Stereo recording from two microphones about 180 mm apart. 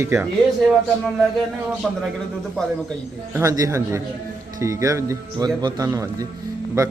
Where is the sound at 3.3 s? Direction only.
20° right (ahead or behind).